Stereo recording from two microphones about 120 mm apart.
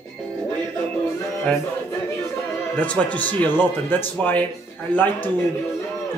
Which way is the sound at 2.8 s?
10° left (ahead or behind).